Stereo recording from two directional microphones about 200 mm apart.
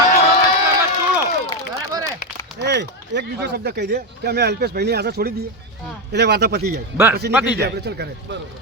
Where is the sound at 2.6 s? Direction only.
55° right (ahead or behind).